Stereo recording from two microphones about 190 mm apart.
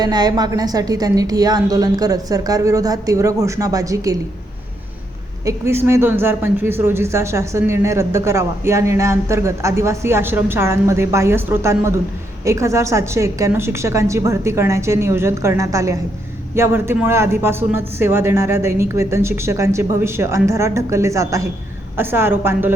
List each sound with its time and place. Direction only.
0.0 s a woman's voice: 20° right (ahead or behind)
5.5 s speech: 15° right (ahead or behind)